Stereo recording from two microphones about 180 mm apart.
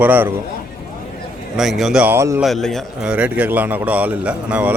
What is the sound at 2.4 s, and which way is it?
A man's voice, centre (ahead or behind).